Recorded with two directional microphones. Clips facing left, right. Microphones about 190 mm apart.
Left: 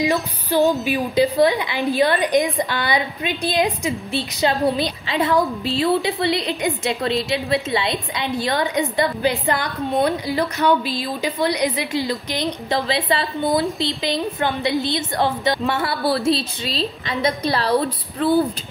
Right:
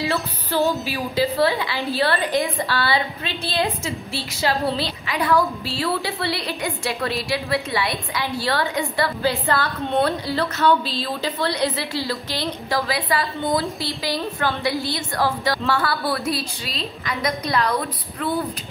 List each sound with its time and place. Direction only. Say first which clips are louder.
0.0 s a woman's voice: left 4 dB; 15° left (ahead or behind); by 18.4 s 30° left (ahead or behind)